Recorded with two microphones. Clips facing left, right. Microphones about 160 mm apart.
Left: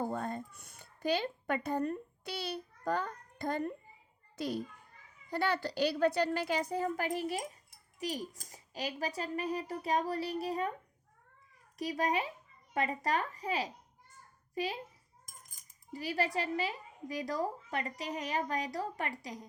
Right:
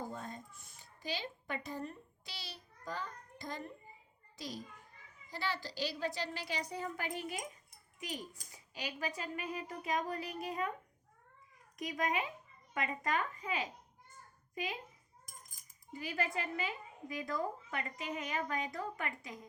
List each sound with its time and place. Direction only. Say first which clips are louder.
0.0 s a child's voice: left 8 dB; 55° left (ahead or behind)
5.3 s a woman's voice: left 8 dB; 60° left (ahead or behind); by 10.7 s 35° left (ahead or behind)
11.8 s a woman's voice: left 3 dB; 35° left (ahead or behind)
15.9 s a woman's voice: left 4 dB; 35° left (ahead or behind)